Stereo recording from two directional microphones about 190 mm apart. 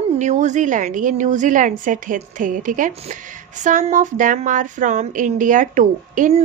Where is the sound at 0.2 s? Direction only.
40° right (ahead or behind).